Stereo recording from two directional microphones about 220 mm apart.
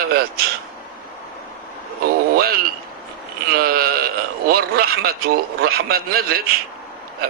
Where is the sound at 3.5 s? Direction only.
45° right (ahead or behind).